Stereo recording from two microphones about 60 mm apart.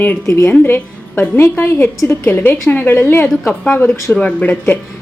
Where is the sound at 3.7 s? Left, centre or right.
Left.